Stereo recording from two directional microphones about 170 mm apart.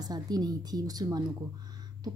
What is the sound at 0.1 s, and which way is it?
A woman's voice, 25° right (ahead or behind).